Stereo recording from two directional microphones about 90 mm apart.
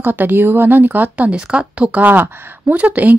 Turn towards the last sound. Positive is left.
turn(degrees=-15)  # may be behind; listen again after turning